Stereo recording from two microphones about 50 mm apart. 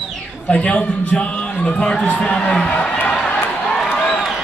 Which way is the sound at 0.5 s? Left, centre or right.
Left.